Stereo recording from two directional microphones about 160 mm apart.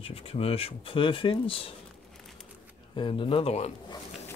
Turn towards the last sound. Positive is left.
turn(degrees=40)  # may be behind; listen again after turning